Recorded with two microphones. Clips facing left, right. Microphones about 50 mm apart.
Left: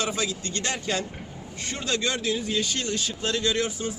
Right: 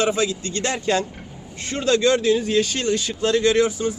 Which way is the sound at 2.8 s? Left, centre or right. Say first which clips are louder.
Right 7 dB; right.